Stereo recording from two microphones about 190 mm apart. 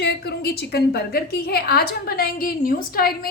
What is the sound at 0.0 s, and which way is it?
A woman's voice, 60° left (ahead or behind).